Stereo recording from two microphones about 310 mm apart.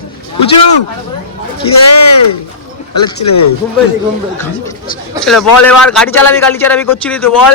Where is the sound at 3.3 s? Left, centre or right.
Left.